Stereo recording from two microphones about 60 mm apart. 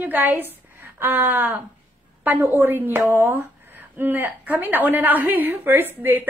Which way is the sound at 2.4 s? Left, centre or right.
Right.